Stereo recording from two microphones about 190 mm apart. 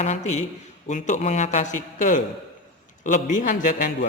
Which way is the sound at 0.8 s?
40° left (ahead or behind).